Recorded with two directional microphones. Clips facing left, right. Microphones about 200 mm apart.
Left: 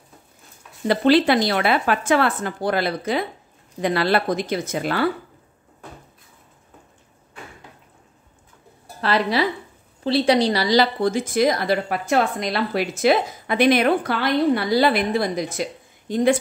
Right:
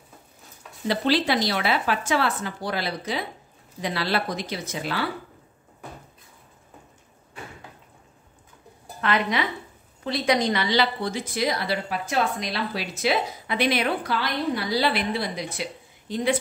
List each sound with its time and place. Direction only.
0.8 s a woman's voice: 55° left (ahead or behind)
9.0 s a woman's voice: 35° left (ahead or behind)